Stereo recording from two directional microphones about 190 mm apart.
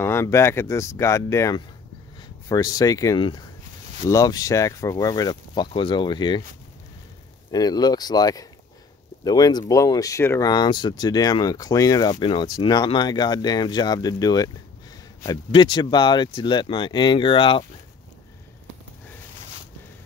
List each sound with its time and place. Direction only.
0.0 s speech: 15° left (ahead or behind)
7.5 s speech: 20° left (ahead or behind)